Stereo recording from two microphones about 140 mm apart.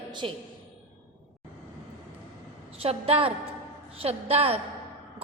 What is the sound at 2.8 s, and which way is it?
A woman's voice, 45° right (ahead or behind).